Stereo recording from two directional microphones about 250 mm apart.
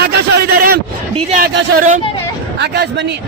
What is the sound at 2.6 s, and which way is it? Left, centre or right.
Speech, right.